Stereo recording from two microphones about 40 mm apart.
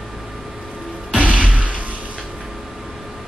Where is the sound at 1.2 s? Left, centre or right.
Right.